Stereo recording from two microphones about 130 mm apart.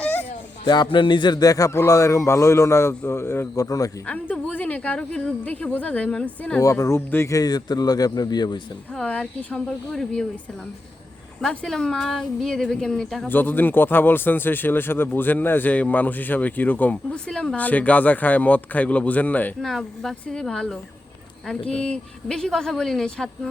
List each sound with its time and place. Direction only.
0.0 s a sound: 15° left (ahead or behind)
0.6 s a man's voice: 35° left (ahead or behind)
4.1 s speech: 10° left (ahead or behind)
6.6 s a man's voice: 25° left (ahead or behind)
9.0 s speech: 10° left (ahead or behind)
11.4 s speech: 5° left (ahead or behind)
19.6 s speech: centre (ahead or behind)